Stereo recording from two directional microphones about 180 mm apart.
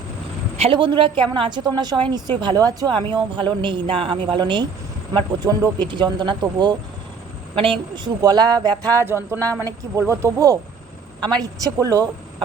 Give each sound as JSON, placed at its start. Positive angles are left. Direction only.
{"t": 0.5, "sound": "speech", "side_deg": -30}
{"t": 11.6, "sound": "speech", "side_deg": -20}